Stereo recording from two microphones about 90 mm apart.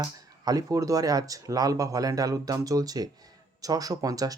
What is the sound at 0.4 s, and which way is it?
Speech, 40° right (ahead or behind).